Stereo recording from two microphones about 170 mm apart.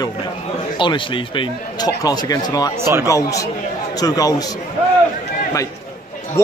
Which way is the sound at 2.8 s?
15° right (ahead or behind).